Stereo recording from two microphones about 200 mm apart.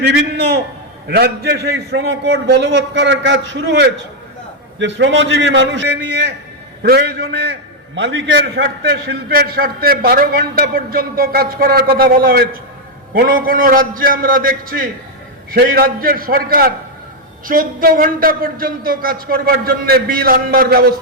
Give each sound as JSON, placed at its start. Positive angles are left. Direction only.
{"t": 0.0, "sound": "a man's voice", "side_deg": -55}